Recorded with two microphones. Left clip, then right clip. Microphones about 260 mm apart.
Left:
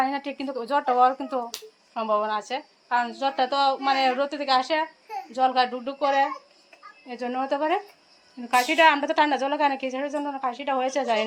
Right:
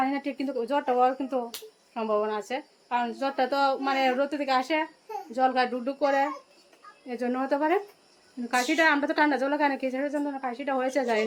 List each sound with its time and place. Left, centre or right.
0.0 s a woman's voice: centre